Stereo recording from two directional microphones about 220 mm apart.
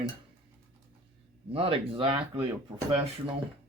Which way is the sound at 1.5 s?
25° right (ahead or behind).